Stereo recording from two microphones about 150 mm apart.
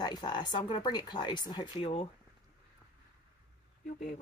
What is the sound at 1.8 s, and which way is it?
Speech, 40° left (ahead or behind).